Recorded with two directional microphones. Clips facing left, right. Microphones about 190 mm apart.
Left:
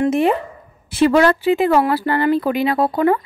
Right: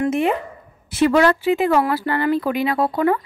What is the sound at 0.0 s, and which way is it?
A woman's voice, 35° left (ahead or behind).